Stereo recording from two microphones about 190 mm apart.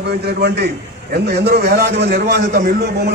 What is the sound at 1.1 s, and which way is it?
A man's voice, 60° right (ahead or behind).